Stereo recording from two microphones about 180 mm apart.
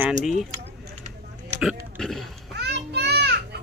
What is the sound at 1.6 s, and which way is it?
Speech, centre (ahead or behind).